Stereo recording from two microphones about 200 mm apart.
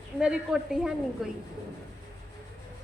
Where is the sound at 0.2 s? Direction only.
5° right (ahead or behind).